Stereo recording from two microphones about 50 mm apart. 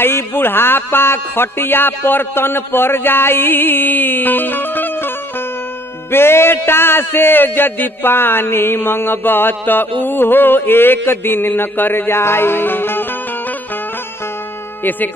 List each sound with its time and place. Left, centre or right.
0.0 s a man's voice: left
6.1 s a man's voice: left
14.8 s speech: left